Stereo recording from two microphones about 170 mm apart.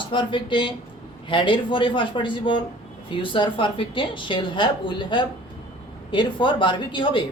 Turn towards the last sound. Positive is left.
turn(degrees=30)  # may be behind; listen again after turning